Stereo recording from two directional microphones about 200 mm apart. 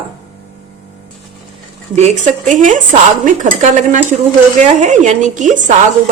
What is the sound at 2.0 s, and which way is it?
Speech, 35° right (ahead or behind).